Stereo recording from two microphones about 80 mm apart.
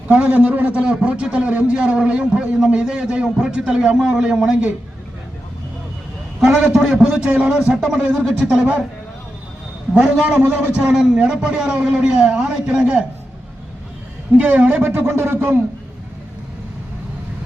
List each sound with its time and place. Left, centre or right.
0.1 s a man's voice: centre
6.4 s a man's voice: centre
9.9 s a man's voice: centre
10.8 s a man's voice: centre
14.3 s speech: centre